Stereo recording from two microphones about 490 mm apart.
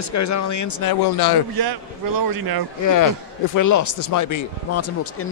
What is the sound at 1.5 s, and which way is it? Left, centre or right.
Speech, right.